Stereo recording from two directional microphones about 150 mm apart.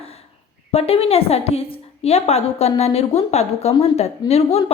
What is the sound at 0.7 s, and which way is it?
A woman's voice, 45° left (ahead or behind).